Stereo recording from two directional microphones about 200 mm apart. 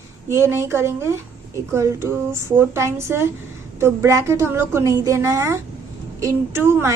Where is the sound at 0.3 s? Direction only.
15° right (ahead or behind).